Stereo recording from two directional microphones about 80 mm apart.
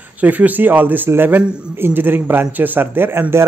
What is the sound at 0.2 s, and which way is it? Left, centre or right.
Speech, right.